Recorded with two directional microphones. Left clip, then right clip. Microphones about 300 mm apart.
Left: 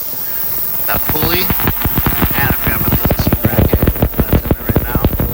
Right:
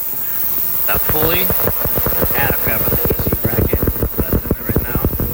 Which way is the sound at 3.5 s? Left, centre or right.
Left.